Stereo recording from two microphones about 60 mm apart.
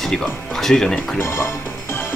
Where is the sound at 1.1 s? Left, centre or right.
Left.